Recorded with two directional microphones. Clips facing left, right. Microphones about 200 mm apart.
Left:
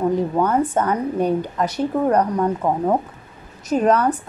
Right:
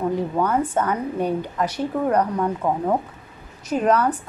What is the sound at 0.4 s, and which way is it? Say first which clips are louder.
Speech: even; 40° left (ahead or behind).